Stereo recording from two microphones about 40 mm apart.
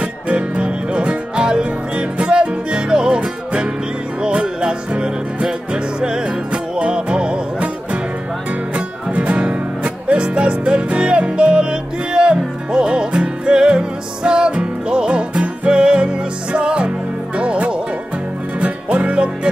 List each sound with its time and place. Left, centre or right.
0.0 s music: right
8.7 s music: right